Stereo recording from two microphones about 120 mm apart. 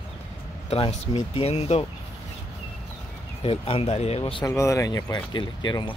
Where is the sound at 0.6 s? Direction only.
55° left (ahead or behind).